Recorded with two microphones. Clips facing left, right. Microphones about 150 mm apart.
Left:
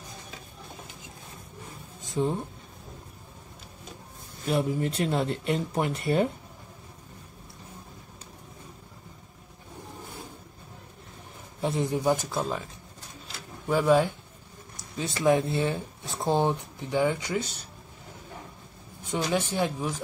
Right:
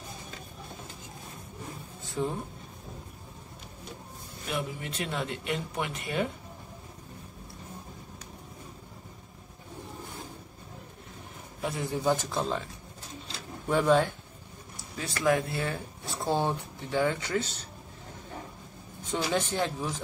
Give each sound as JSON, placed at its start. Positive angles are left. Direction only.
{"t": 2.0, "sound": "a sound", "side_deg": 20}
{"t": 4.5, "sound": "speech", "side_deg": 40}
{"t": 11.6, "sound": "speech", "side_deg": 20}
{"t": 13.7, "sound": "speech", "side_deg": 5}
{"t": 14.8, "sound": "speech", "side_deg": 20}
{"t": 19.3, "sound": "speech", "side_deg": 10}